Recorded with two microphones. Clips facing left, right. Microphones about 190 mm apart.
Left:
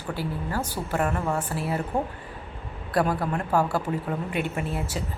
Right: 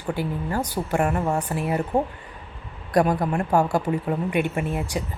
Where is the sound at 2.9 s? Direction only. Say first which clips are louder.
Right 4 dB; 20° right (ahead or behind).